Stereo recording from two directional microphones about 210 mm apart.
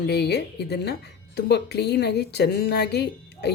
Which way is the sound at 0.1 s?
50° left (ahead or behind).